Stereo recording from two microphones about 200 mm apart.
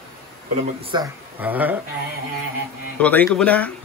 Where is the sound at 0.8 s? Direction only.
20° right (ahead or behind).